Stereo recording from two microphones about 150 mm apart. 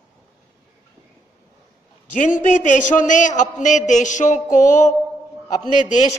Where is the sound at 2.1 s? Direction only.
60° left (ahead or behind).